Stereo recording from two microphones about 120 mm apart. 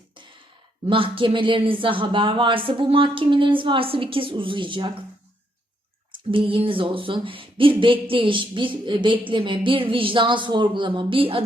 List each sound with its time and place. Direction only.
0.9 s speech: 45° right (ahead or behind)
6.3 s speech: 50° right (ahead or behind)